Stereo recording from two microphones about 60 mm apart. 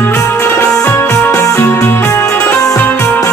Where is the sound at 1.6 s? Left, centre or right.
Left.